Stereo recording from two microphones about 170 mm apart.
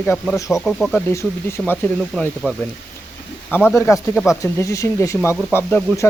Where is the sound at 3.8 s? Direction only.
15° left (ahead or behind).